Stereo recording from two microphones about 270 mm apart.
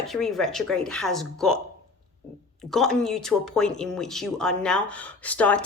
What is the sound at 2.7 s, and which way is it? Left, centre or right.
Speech, centre.